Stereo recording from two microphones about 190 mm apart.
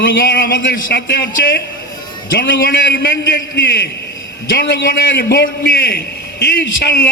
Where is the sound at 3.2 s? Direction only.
50° left (ahead or behind).